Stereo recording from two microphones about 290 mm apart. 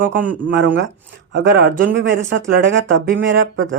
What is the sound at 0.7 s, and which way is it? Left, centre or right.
Speech, right.